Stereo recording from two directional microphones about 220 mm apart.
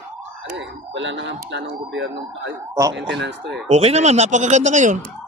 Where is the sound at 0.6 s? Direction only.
55° right (ahead or behind).